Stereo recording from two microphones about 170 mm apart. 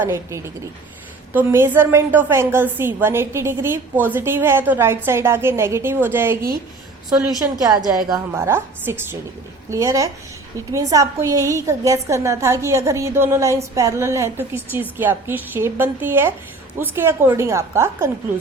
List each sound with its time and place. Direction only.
0.0 s a woman's voice: 15° right (ahead or behind)